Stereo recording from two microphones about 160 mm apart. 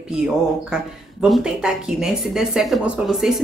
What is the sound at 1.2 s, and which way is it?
Speech, 5° right (ahead or behind).